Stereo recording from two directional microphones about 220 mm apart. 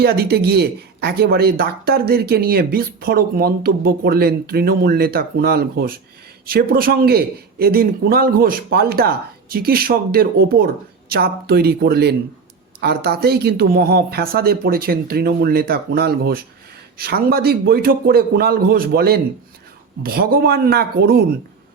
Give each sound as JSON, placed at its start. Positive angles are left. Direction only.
{"t": 0.0, "sound": "speech", "side_deg": -45}